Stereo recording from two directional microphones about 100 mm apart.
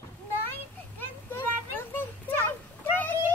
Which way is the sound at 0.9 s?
20° left (ahead or behind).